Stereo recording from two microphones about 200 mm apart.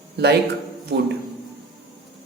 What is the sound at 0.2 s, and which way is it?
Speech, 55° right (ahead or behind).